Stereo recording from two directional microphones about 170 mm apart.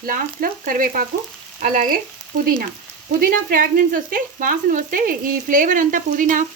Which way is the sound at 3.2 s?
55° right (ahead or behind).